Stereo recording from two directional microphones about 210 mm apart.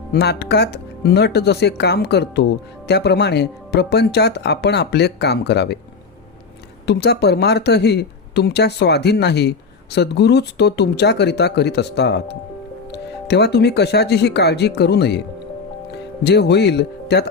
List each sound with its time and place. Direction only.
0.1 s speech: 50° left (ahead or behind)
6.8 s speech: 50° left (ahead or behind)